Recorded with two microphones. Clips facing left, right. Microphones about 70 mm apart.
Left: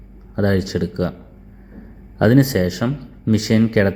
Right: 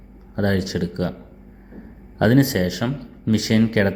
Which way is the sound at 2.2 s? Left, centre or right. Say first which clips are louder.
Left 2 dB; left.